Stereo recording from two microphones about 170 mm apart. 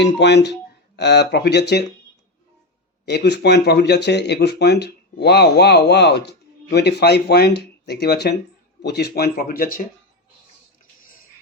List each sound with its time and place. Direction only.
0.0 s speech: 90° left
3.1 s speech: 80° left; by 9.8 s 55° left (ahead or behind)